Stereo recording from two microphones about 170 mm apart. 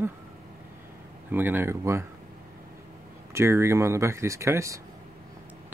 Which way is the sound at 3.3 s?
15° right (ahead or behind).